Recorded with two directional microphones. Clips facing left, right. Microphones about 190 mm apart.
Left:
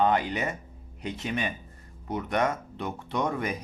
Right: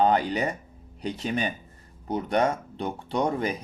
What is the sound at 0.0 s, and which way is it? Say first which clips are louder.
Speech: right 2 dB; 35° right (ahead or behind).